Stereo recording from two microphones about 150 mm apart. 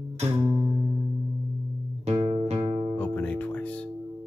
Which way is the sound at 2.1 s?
45° right (ahead or behind).